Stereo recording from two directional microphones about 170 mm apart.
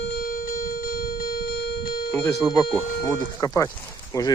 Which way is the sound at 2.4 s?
5° left (ahead or behind).